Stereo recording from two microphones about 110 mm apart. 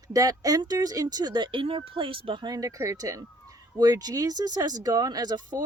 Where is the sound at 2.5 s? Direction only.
30° right (ahead or behind).